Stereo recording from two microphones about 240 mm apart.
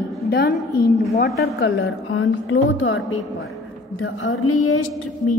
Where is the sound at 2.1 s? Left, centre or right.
Left.